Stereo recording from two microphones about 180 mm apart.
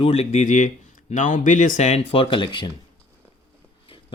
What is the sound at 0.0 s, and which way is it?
Speech, 35° left (ahead or behind).